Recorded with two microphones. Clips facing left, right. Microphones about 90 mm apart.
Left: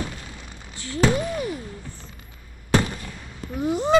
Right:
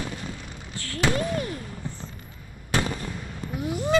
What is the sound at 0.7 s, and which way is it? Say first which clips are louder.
Speech: left 4 dB; 20° left (ahead or behind).